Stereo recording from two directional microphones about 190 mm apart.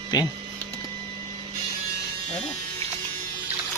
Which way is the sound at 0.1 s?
20° left (ahead or behind).